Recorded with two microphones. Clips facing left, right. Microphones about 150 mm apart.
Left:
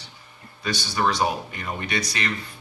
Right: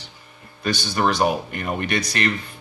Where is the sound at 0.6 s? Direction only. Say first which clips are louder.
Right 3 dB; 55° right (ahead or behind).